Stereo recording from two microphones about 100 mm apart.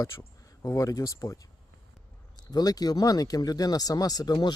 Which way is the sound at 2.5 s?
40° left (ahead or behind).